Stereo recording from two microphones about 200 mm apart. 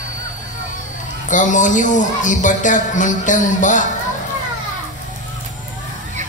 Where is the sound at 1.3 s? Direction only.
40° left (ahead or behind).